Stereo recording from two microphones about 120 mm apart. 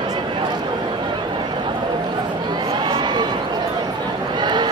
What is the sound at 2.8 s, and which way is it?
Run, 40° right (ahead or behind).